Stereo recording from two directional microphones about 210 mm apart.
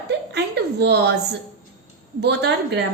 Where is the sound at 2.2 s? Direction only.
55° right (ahead or behind).